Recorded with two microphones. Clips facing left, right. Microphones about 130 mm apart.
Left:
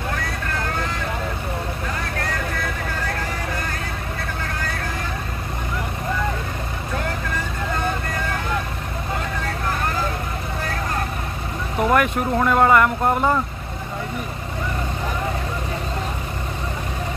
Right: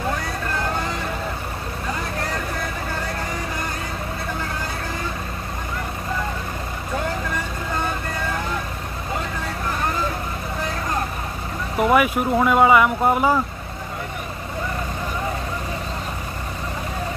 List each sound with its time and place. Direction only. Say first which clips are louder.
11.8 s speech: right 1 dB; 5° right (ahead or behind)